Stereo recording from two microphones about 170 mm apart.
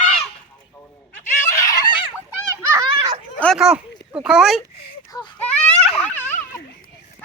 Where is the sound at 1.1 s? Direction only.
15° left (ahead or behind).